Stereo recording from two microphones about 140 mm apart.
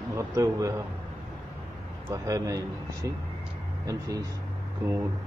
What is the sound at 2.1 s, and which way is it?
A man's voice, 25° right (ahead or behind).